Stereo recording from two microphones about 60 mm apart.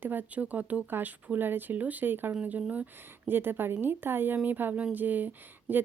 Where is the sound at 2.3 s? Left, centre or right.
Right.